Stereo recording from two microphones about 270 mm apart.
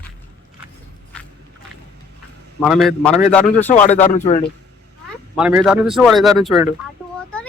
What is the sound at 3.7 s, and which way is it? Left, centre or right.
Speech, left.